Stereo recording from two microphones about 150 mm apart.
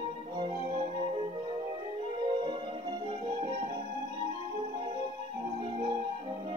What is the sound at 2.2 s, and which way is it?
Music, 35° right (ahead or behind).